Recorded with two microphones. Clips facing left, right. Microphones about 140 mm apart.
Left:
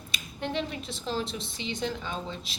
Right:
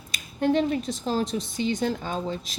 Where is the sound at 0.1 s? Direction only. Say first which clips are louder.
Right 10 dB; 45° right (ahead or behind).